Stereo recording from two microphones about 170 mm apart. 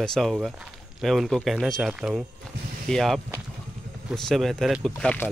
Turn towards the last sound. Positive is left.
turn(degrees=10)  # may be behind; listen again after turning